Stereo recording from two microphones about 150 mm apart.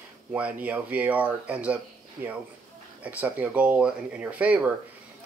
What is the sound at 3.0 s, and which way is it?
Speech, 10° right (ahead or behind).